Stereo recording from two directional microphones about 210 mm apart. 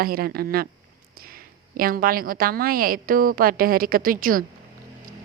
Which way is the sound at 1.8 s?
45° right (ahead or behind).